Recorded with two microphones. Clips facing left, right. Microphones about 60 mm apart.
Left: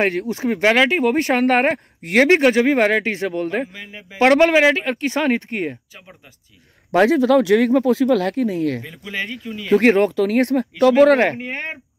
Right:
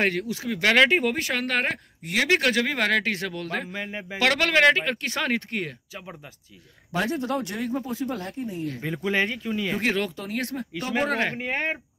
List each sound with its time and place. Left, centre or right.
0.0 s speech: centre
0.3 s speech: left
0.7 s speech: centre
1.2 s speech: left
2.2 s speech: left
4.6 s speech: centre
6.9 s speech: left
9.1 s speech: centre
9.8 s speech: left
10.8 s speech: left
11.3 s speech: centre